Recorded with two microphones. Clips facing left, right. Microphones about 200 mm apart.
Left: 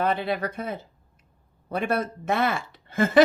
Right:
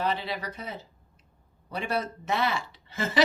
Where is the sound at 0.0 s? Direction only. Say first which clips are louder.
Left 5 dB; 55° left (ahead or behind).